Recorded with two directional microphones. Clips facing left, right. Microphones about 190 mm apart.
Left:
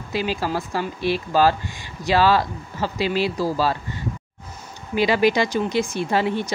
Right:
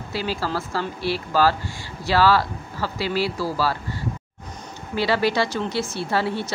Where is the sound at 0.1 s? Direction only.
15° left (ahead or behind).